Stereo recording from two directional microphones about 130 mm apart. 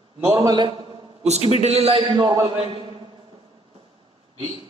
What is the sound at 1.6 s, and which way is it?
Speech, 50° right (ahead or behind).